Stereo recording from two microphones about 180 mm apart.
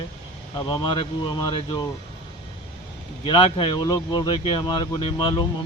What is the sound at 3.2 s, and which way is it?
Speech, 30° left (ahead or behind).